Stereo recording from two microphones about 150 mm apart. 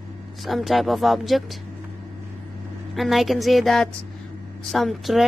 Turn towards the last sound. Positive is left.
turn(degrees=0)  # may be behind; listen again after turning